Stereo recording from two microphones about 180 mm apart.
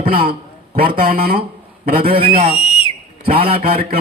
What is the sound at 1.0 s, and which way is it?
A man's voice, 55° right (ahead or behind).